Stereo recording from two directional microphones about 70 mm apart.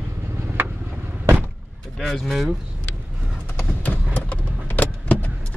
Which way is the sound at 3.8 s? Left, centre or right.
Left.